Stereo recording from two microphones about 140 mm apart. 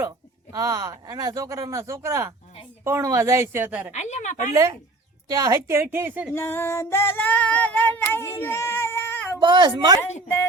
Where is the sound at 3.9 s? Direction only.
55° left (ahead or behind).